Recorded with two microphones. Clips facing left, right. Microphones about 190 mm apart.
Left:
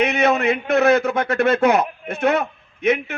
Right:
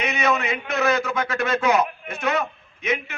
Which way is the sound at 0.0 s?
60° left (ahead or behind).